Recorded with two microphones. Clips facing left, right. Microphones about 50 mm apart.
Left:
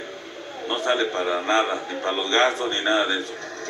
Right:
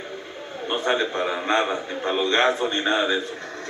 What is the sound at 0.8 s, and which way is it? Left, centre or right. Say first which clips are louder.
A man's voice: left 1 dB; centre.